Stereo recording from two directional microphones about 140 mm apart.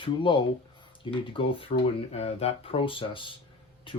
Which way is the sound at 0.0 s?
35° left (ahead or behind).